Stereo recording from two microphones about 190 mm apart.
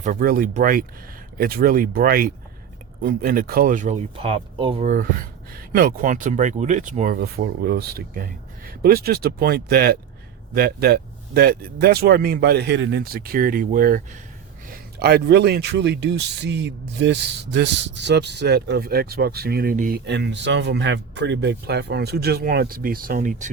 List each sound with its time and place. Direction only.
0.0 s speech: 45° right (ahead or behind)
5.5 s speech: 50° right (ahead or behind)
20.1 s speech: 65° right (ahead or behind); by 23.5 s 45° right (ahead or behind)